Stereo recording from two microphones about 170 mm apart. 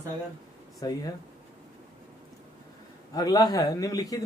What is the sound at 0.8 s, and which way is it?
Speech, 20° left (ahead or behind).